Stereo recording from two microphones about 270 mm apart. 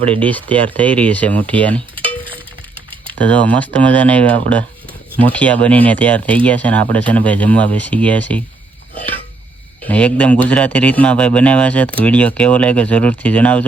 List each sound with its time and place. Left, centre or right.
0.2 s speech: centre
9.0 s a sound: centre
9.8 s speech: centre